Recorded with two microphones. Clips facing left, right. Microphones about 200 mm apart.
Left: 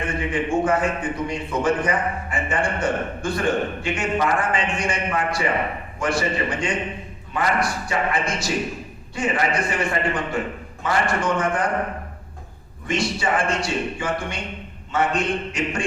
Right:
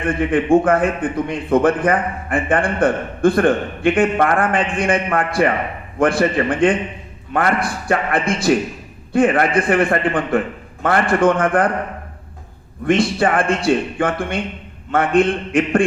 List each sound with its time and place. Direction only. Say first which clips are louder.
0.1 s a man's voice: right 11 dB; 55° right (ahead or behind)
12.8 s a man's voice: right 8 dB; 55° right (ahead or behind)